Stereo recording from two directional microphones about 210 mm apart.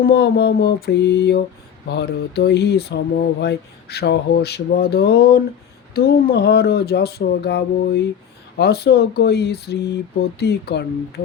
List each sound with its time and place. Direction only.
0.0 s speech: 50° left (ahead or behind)